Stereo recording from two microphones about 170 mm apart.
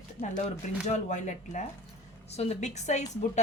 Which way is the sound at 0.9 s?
45° left (ahead or behind).